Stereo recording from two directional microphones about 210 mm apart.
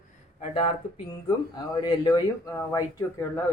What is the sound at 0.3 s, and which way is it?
Speech, 30° left (ahead or behind).